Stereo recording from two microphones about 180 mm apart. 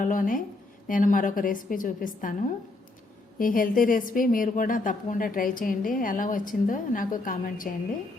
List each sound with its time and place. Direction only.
0.0 s a woman's voice: 50° left (ahead or behind)
3.3 s a woman's voice: 50° left (ahead or behind)